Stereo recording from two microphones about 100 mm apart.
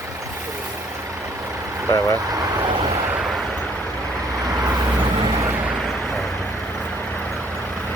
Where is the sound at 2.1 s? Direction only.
35° right (ahead or behind).